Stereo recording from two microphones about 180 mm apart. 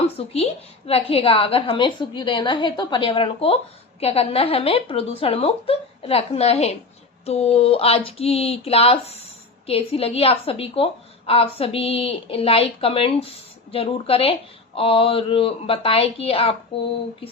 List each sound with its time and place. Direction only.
0.2 s a woman's voice: 35° left (ahead or behind)